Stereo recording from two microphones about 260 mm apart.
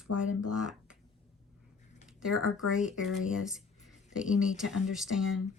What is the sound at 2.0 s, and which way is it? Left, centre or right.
Speech, centre.